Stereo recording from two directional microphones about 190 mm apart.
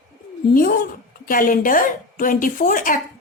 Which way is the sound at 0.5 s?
50° left (ahead or behind).